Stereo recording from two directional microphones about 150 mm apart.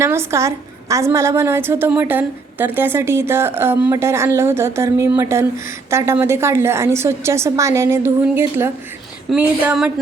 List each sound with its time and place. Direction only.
0.0 s a woman's voice: 15° right (ahead or behind)